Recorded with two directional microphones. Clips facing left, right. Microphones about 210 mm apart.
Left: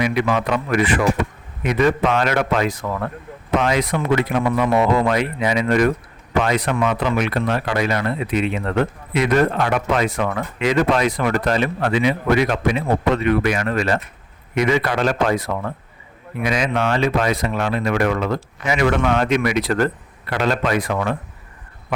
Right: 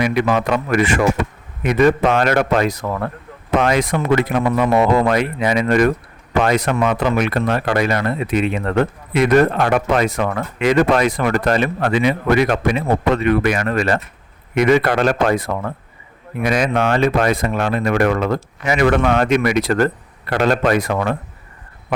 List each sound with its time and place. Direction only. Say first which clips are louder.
0.0 s speech: right 2 dB; 45° right (ahead or behind)
3.6 s speech: right 4 dB; 50° right (ahead or behind)